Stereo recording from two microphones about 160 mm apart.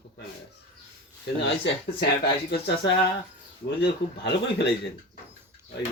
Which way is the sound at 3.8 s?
90° left.